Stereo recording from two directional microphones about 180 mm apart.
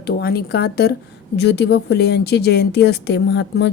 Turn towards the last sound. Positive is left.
turn(degrees=70)  # may be behind; listen again after turning